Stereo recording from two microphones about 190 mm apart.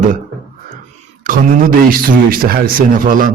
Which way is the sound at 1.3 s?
45° right (ahead or behind).